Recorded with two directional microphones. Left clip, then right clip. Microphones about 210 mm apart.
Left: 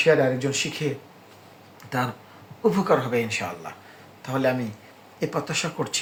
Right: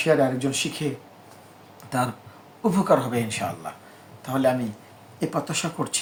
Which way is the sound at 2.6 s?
20° right (ahead or behind).